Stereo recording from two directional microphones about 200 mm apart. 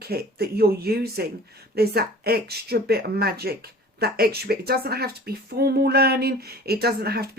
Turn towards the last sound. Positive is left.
turn(degrees=-50)  # may be behind; listen again after turning